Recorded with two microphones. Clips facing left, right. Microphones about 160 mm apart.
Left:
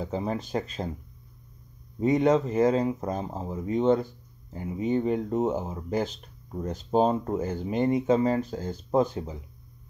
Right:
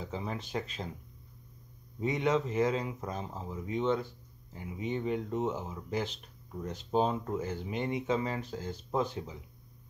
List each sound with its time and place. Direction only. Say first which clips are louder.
0.0 s speech: left 8 dB; 40° left (ahead or behind)
2.0 s speech: left 8 dB; 40° left (ahead or behind)